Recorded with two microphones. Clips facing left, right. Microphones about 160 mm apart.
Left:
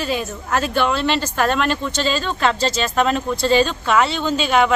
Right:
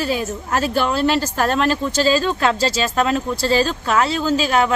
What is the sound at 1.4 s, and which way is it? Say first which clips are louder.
Speech: right 1 dB; 35° right (ahead or behind).